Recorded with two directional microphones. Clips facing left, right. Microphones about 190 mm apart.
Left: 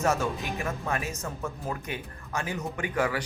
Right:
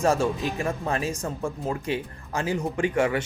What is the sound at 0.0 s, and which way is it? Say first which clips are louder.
Speech: right 4 dB; 30° right (ahead or behind).